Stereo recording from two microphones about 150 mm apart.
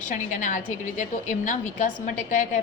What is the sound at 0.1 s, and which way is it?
A woman's voice, 55° left (ahead or behind).